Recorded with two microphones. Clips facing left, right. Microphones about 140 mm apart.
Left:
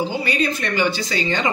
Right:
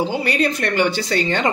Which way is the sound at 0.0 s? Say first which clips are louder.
Right 2 dB; 65° right (ahead or behind).